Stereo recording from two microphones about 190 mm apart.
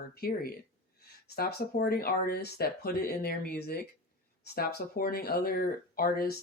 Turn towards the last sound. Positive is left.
turn(degrees=50)  # may be behind; listen again after turning